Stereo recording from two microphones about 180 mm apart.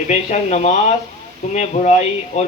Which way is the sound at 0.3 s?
35° left (ahead or behind).